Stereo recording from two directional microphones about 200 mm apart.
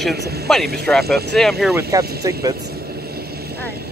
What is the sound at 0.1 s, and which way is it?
Speech, 55° right (ahead or behind).